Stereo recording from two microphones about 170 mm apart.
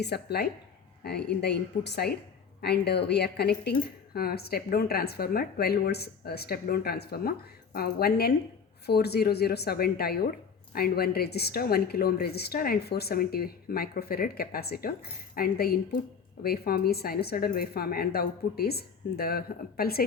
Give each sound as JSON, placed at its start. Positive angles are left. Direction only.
{"t": 0.0, "sound": "a woman's voice", "side_deg": 70}